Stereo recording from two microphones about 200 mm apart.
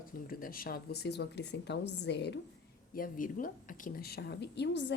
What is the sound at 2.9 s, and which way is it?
Speech, 45° left (ahead or behind).